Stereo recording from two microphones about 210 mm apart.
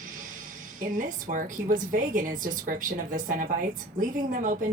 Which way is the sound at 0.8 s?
40° right (ahead or behind).